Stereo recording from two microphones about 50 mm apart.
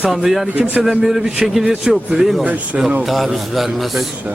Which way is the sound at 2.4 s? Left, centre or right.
Right.